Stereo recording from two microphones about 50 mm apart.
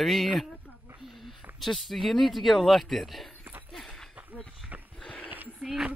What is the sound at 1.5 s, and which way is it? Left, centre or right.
Speech, centre.